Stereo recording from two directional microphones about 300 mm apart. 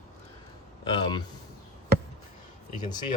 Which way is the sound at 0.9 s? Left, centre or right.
Centre.